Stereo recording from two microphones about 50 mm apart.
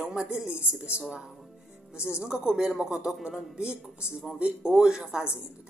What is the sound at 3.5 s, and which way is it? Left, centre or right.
Speech, right.